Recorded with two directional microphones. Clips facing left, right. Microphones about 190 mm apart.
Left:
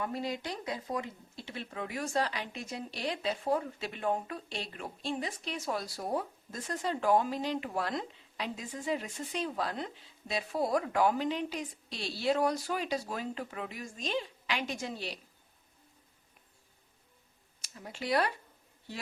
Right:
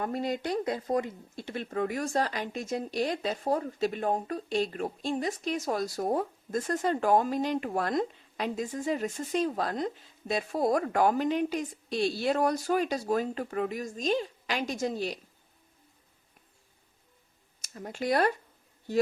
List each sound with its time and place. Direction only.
0.0 s speech: 50° right (ahead or behind)
17.6 s speech: 45° right (ahead or behind)